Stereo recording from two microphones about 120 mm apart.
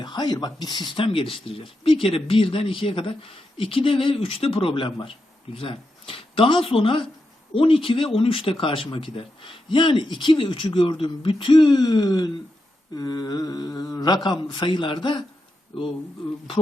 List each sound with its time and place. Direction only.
0.0 s speech: 35° left (ahead or behind)